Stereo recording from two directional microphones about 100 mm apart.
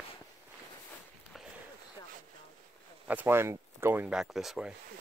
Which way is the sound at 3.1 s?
20° right (ahead or behind).